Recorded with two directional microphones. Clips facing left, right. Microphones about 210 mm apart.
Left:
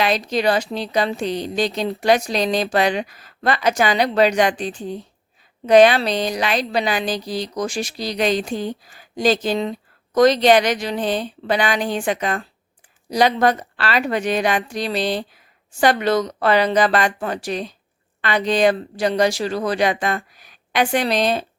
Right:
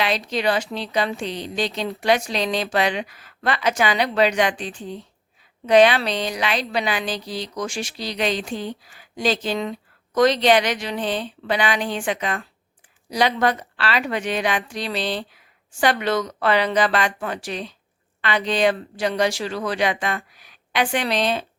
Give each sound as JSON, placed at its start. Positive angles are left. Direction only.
{"t": 0.0, "sound": "a woman's voice", "side_deg": 45}